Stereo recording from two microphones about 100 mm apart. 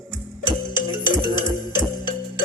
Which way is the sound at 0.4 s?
50° left (ahead or behind).